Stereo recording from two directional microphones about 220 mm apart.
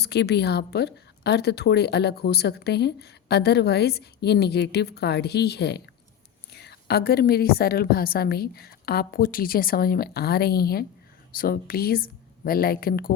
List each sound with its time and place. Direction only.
0.0 s a woman's voice: 50° left (ahead or behind)